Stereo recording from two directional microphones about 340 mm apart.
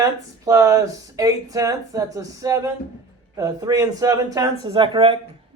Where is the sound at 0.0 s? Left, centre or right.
Centre.